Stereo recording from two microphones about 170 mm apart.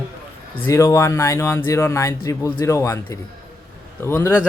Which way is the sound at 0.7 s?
20° left (ahead or behind).